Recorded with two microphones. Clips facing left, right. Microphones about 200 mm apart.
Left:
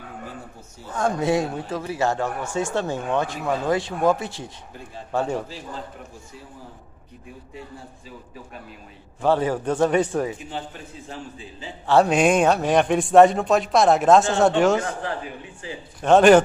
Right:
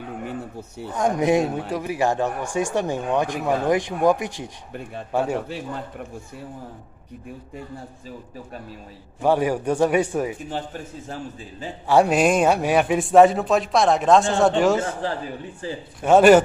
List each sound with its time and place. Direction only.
0.3 s a man's voice: 65° right (ahead or behind)
0.9 s speech: 15° right (ahead or behind)
9.2 s speech: 10° right (ahead or behind)
10.5 s a man's voice: 45° right (ahead or behind)
11.9 s a man's voice: 5° right (ahead or behind)
14.8 s a man's voice: 30° right (ahead or behind)
16.0 s speech: 5° right (ahead or behind)